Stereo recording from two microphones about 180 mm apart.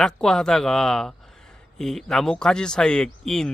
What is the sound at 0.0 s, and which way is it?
Speech, 5° left (ahead or behind).